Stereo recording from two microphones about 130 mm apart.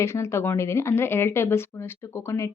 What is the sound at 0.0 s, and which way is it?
Speech, 20° left (ahead or behind).